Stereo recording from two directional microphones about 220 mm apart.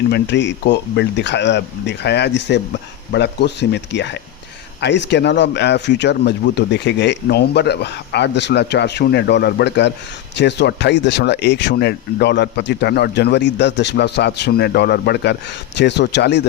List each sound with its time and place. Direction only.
0.1 s speech: 55° left (ahead or behind)